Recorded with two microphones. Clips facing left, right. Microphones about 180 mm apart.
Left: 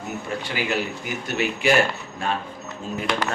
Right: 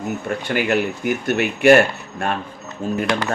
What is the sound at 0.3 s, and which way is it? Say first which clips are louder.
Speech: right 6 dB; 55° right (ahead or behind).